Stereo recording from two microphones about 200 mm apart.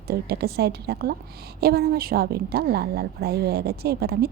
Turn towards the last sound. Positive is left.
turn(degrees=-50)  # may be behind; listen again after turning